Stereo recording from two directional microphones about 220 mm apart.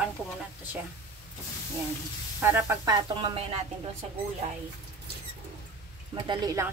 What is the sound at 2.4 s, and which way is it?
Speech, 10° right (ahead or behind).